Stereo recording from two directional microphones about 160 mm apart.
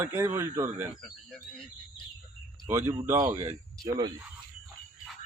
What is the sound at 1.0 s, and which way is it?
Speech, centre (ahead or behind).